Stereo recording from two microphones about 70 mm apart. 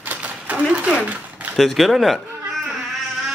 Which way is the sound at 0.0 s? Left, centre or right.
Right.